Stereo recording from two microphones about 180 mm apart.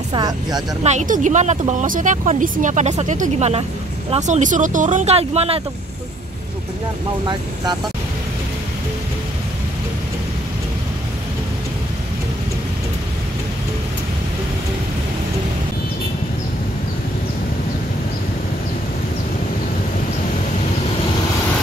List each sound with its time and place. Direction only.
0.1 s speech: 20° right (ahead or behind)
0.8 s speech: 45° right (ahead or behind)